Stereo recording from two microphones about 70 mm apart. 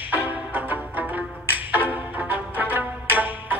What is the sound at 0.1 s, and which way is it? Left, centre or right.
Music, right.